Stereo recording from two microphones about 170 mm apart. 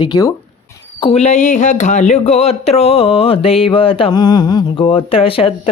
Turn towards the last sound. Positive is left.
turn(degrees=35)  # may be behind; listen again after turning